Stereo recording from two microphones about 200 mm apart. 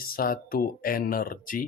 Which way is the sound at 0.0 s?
45° left (ahead or behind).